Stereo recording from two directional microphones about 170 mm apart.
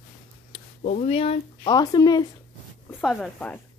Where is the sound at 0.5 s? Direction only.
35° left (ahead or behind).